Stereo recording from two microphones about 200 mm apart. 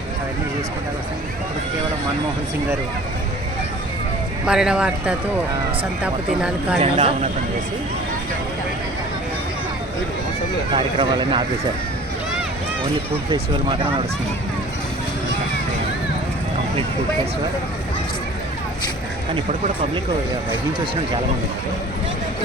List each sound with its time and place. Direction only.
4.4 s speech: 5° right (ahead or behind)
6.7 s speech: 30° right (ahead or behind)
10.8 s speech: 25° right (ahead or behind)